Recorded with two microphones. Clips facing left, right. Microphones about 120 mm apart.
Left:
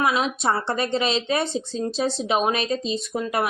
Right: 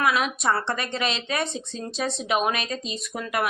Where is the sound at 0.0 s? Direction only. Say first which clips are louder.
Left 1 dB; 30° left (ahead or behind).